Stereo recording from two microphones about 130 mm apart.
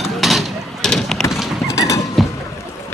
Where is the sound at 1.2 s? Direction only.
Centre (ahead or behind).